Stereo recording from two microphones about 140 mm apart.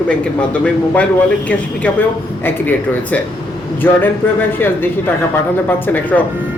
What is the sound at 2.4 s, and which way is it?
Speech, 15° left (ahead or behind).